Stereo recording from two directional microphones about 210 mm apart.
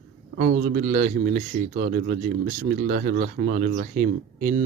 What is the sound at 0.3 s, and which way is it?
Speech, 40° right (ahead or behind).